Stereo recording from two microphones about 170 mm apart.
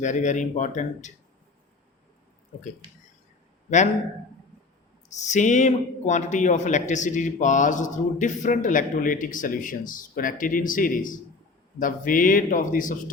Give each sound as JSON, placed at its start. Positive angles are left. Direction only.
{"t": 0.0, "sound": "speech", "side_deg": 45}
{"t": 5.0, "sound": "speech", "side_deg": 45}